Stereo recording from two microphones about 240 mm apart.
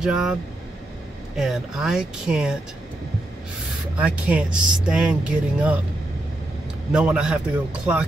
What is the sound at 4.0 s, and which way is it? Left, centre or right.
Speech, centre.